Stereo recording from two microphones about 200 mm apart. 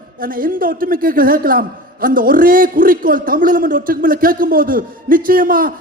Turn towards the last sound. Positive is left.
turn(degrees=-45)  # may be behind; listen again after turning